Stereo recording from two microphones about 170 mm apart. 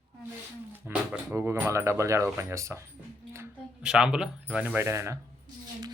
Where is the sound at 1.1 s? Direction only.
15° right (ahead or behind).